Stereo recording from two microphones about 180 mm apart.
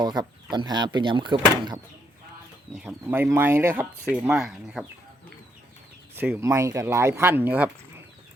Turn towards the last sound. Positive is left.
turn(degrees=-10)  # may be behind; listen again after turning